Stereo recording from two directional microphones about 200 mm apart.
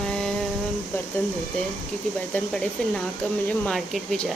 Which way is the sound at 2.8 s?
5° left (ahead or behind).